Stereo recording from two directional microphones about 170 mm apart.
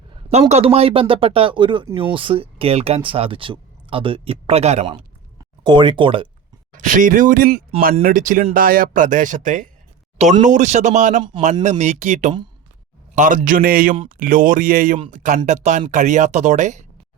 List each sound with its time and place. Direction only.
0.3 s speech: 40° right (ahead or behind)
6.7 s speech: 50° right (ahead or behind)